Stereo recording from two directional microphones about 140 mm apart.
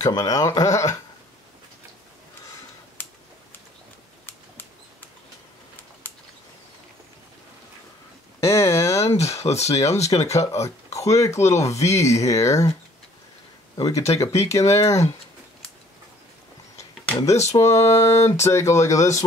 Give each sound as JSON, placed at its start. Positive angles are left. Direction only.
{"t": 0.0, "sound": "speech", "side_deg": 25}
{"t": 3.0, "sound": "a sound", "side_deg": 15}
{"t": 8.4, "sound": "a sound", "side_deg": 20}
{"t": 9.0, "sound": "speech", "side_deg": 50}
{"t": 10.1, "sound": "speech", "side_deg": 20}
{"t": 13.7, "sound": "speech", "side_deg": 25}
{"t": 17.2, "sound": "speech", "side_deg": 20}